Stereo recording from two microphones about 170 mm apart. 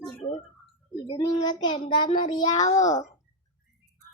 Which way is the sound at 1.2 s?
25° left (ahead or behind).